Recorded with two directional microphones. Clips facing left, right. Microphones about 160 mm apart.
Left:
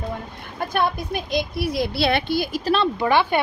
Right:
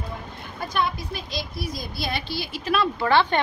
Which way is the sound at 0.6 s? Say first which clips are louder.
Left 4 dB; 55° left (ahead or behind).